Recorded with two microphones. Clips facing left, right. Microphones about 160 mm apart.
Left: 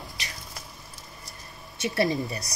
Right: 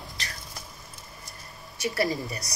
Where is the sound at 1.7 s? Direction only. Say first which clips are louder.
Left 2 dB; 25° left (ahead or behind).